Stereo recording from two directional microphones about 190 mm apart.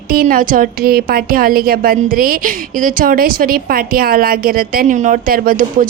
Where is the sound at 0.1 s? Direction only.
50° right (ahead or behind).